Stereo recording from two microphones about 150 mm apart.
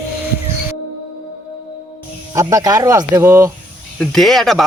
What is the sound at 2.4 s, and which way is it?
Speech, 25° right (ahead or behind).